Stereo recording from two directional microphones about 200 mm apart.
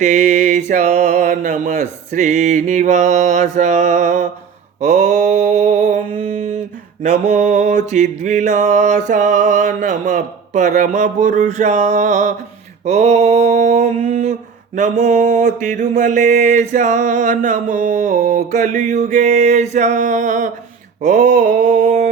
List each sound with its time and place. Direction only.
0.0 s mantra: 35° right (ahead or behind)
7.0 s mantra: 40° right (ahead or behind)